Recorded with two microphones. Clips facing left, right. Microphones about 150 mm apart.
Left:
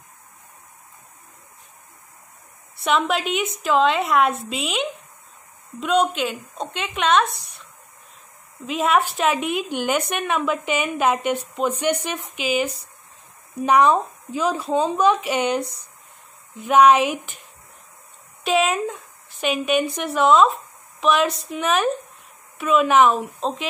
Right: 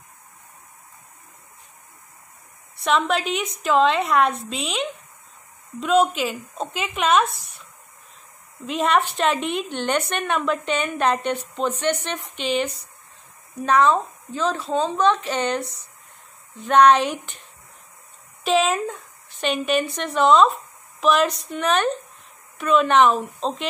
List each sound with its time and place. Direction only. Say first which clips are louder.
2.8 s speech: even; centre (ahead or behind)
8.6 s speech: left 1 dB; centre (ahead or behind)
18.4 s speech: even; centre (ahead or behind)